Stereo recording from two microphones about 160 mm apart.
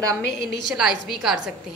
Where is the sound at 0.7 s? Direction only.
5° right (ahead or behind).